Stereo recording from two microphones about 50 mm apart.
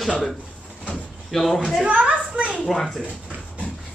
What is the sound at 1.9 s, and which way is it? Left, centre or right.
Speech, right.